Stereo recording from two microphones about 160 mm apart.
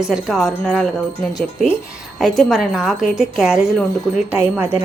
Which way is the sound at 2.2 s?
Centre (ahead or behind).